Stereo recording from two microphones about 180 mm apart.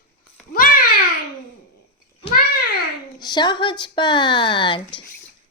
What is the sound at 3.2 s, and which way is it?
Speech, 25° left (ahead or behind).